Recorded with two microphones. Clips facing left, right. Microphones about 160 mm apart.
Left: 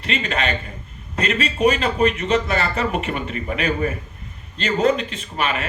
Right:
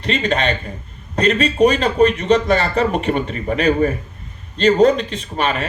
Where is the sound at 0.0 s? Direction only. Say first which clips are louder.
Right 5 dB; 35° right (ahead or behind).